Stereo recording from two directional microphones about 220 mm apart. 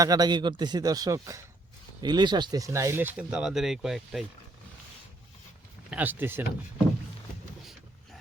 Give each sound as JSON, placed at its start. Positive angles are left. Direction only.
{"t": 0.0, "sound": "speech", "side_deg": -15}
{"t": 5.9, "sound": "speech", "side_deg": -10}